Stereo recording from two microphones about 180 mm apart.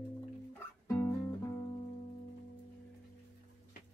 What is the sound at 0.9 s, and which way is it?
Music, 15° left (ahead or behind).